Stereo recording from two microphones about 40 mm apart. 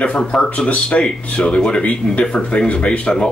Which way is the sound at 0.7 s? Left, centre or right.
Left.